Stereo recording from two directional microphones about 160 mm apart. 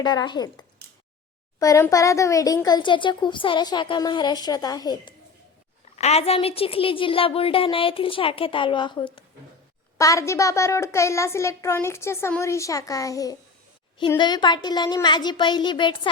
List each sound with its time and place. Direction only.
0.0 s speech: 25° left (ahead or behind)
1.5 s speech: 20° left (ahead or behind)
6.0 s a woman's voice: 40° left (ahead or behind)
10.0 s a child's voice: 20° left (ahead or behind)